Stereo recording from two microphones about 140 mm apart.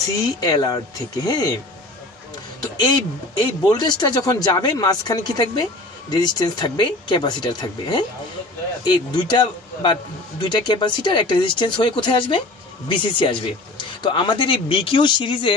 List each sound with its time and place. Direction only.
0.1 s speech: 30° left (ahead or behind)
3.3 s speech: 30° left (ahead or behind)